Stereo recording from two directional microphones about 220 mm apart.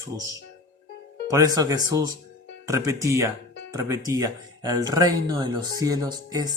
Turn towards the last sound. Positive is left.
turn(degrees=-20)  # may be behind; listen again after turning